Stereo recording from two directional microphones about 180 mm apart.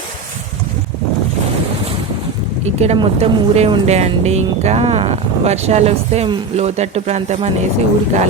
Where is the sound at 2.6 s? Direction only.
35° right (ahead or behind).